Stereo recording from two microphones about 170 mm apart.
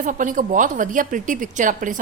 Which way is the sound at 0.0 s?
50° right (ahead or behind).